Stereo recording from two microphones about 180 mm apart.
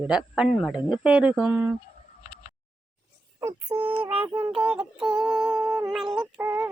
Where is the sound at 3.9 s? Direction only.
30° right (ahead or behind).